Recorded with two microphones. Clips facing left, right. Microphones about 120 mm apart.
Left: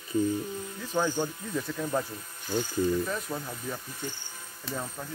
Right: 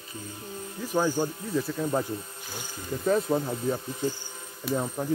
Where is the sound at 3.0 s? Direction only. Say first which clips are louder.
Right 9 dB; 30° right (ahead or behind).